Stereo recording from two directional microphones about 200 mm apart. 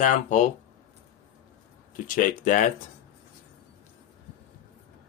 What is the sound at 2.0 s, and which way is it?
Speech, 40° left (ahead or behind).